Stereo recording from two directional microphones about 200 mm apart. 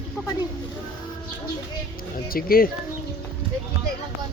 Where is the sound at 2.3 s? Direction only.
45° left (ahead or behind).